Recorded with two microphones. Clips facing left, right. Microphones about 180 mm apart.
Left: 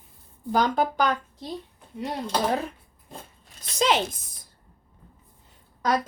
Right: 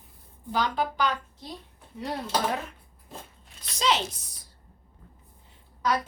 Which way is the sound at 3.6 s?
50° left (ahead or behind).